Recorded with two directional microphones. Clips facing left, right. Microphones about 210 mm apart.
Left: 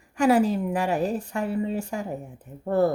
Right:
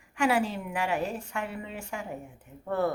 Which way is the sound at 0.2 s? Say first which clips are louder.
Left 7 dB; 40° left (ahead or behind).